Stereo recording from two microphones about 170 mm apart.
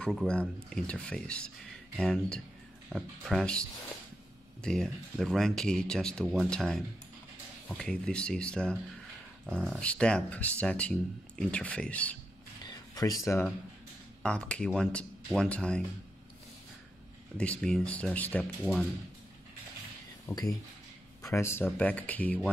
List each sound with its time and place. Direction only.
0.0 s speech: 5° left (ahead or behind)
4.6 s speech: centre (ahead or behind)
12.6 s a sound: 20° left (ahead or behind)
14.2 s speech: 5° left (ahead or behind)
17.4 s speech: 5° left (ahead or behind)
20.3 s speech: 15° left (ahead or behind)